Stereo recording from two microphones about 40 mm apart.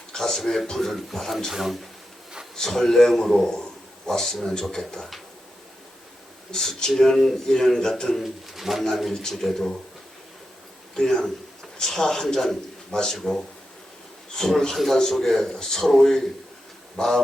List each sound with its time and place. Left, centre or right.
0.1 s speech: centre
2.6 s a man's voice: centre
6.5 s speech: centre
8.2 s speech: centre
8.8 s speech: centre
10.9 s speech: centre